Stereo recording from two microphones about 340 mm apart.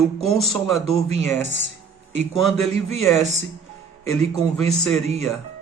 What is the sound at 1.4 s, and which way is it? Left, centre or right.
Speech, left.